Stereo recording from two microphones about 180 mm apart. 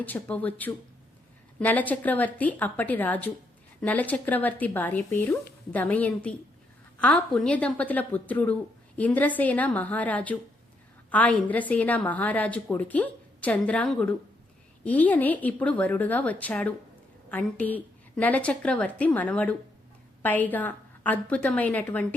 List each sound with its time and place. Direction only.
0.0 s a woman's voice: 10° left (ahead or behind)